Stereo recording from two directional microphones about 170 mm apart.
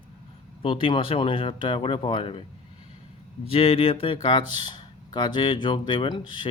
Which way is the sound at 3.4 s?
35° left (ahead or behind).